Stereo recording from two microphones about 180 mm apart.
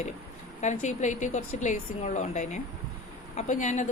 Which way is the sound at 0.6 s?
40° left (ahead or behind).